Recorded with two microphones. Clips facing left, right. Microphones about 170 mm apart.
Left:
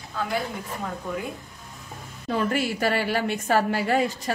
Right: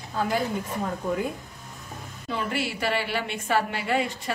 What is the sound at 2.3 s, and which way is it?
A woman's voice, 45° left (ahead or behind).